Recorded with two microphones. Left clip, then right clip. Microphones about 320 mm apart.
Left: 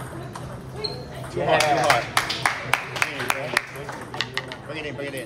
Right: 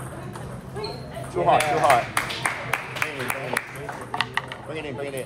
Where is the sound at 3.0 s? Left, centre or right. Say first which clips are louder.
Left 3 dB; left.